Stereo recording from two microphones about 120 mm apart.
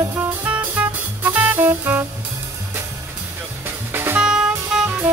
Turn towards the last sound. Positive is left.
turn(degrees=-5)  # may be behind; listen again after turning